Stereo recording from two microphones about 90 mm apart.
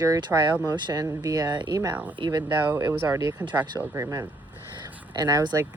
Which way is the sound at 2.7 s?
25° right (ahead or behind).